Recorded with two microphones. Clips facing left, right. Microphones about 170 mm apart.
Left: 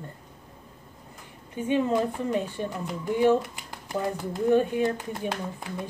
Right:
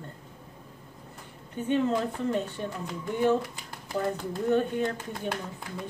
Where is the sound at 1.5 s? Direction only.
10° left (ahead or behind).